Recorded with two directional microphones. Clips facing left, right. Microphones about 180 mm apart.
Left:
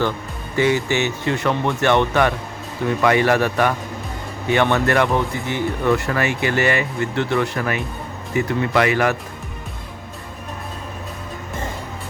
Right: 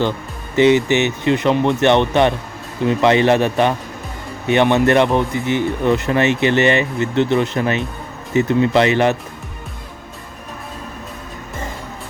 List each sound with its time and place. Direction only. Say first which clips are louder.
0.5 s speech: right 6 dB; 20° right (ahead or behind)